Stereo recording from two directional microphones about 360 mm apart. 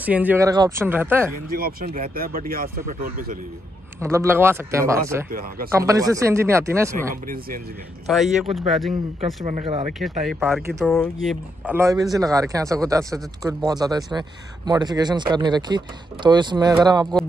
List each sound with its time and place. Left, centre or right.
0.0 s speech: centre
1.3 s speech: right
4.0 s speech: centre
7.1 s speech: right
8.1 s speech: centre
9.2 s speech: centre
10.2 s speech: centre